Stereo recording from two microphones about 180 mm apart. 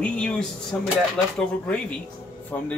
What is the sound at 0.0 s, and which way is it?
Speech, 5° left (ahead or behind).